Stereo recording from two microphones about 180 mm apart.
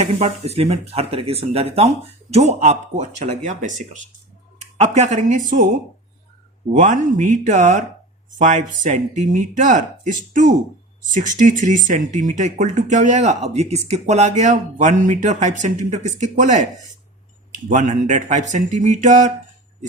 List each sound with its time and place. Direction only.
0.0 s speech: 35° right (ahead or behind)
6.7 s speech: 45° right (ahead or behind)
17.7 s speech: 40° right (ahead or behind)